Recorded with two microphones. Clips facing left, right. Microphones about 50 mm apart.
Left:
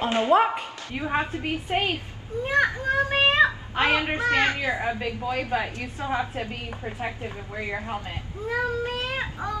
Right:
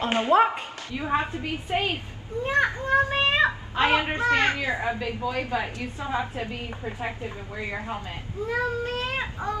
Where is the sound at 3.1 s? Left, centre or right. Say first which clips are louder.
Left 2 dB; left.